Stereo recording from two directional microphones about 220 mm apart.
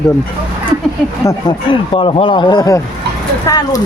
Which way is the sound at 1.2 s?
25° left (ahead or behind).